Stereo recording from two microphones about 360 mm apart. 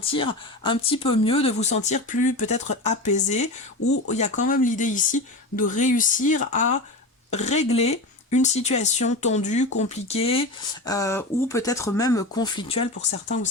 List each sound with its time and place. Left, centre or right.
0.1 s speech: centre
3.8 s speech: left
4.1 s speech: centre